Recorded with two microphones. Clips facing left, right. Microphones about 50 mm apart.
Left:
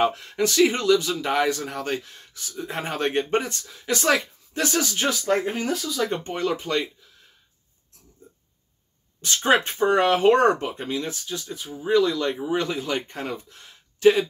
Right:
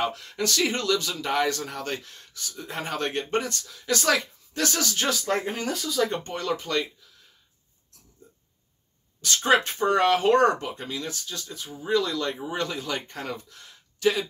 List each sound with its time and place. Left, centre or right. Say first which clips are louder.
0.0 s speech: left 5 dB; left; by 6.2 s centre
6.2 s speech: left 3 dB; centre
9.2 s speech: left 1 dB; left
11.2 s speech: left 4 dB; centre